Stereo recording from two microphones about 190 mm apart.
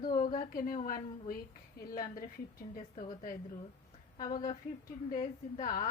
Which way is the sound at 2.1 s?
50° left (ahead or behind).